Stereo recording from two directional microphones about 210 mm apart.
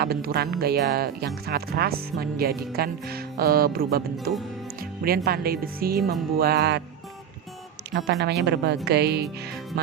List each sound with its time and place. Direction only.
0.0 s speech: 45° right (ahead or behind)
8.2 s speech: 55° right (ahead or behind)
9.7 s music: 50° right (ahead or behind)